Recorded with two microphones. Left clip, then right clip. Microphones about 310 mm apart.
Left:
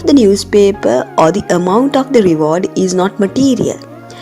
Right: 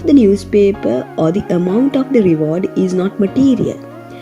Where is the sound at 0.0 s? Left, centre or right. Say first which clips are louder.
Left 2 dB; centre.